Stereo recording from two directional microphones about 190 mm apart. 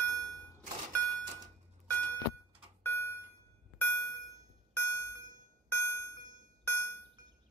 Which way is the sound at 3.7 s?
10° left (ahead or behind).